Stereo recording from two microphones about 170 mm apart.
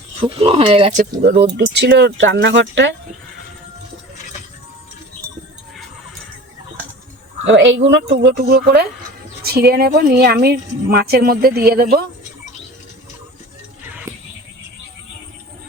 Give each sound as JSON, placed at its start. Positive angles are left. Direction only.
{"t": 0.3, "sound": "speech", "side_deg": -35}
{"t": 1.5, "sound": "speech", "side_deg": -90}
{"t": 7.4, "sound": "speech", "side_deg": -90}
{"t": 7.9, "sound": "a woman's voice", "side_deg": -80}